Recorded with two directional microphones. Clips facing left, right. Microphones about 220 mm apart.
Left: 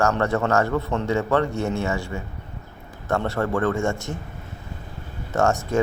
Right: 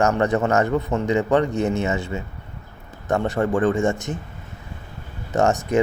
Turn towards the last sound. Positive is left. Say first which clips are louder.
# right 2 dB
turn(degrees=-20)  # may be behind; listen again after turning